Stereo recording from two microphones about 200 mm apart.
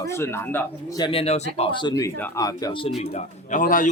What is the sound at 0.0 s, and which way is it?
Speech, 15° left (ahead or behind).